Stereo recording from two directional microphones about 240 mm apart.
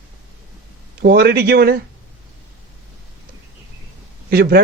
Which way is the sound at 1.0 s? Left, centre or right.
Right.